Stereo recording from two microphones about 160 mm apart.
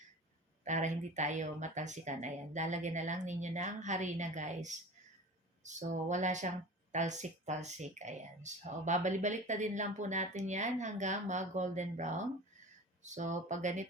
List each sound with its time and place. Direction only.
0.6 s speech: 50° right (ahead or behind)